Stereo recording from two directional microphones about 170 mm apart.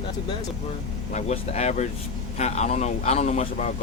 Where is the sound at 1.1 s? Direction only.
40° left (ahead or behind).